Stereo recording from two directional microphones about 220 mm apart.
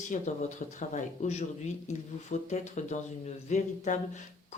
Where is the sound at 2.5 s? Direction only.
35° left (ahead or behind).